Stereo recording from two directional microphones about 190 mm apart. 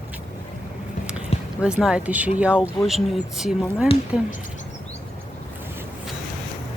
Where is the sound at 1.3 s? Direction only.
35° left (ahead or behind).